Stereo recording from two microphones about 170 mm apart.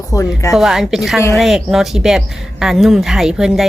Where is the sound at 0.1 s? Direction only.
20° left (ahead or behind).